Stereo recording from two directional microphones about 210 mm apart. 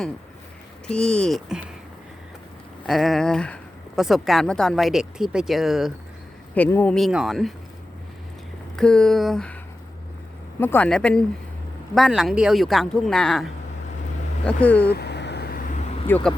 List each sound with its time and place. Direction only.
0.9 s speech: 5° left (ahead or behind)
2.8 s speech: centre (ahead or behind)
6.5 s speech: 10° left (ahead or behind)
8.7 s speech: 5° left (ahead or behind)
10.6 s speech: 10° left (ahead or behind)
14.8 s vehicle: 50° left (ahead or behind)
16.0 s speech: 10° left (ahead or behind)